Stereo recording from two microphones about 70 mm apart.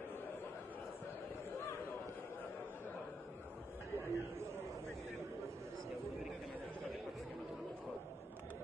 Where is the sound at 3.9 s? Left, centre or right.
Right.